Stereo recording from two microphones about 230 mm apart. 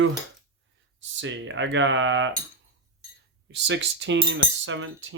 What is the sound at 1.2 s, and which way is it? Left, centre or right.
Cutlery, right.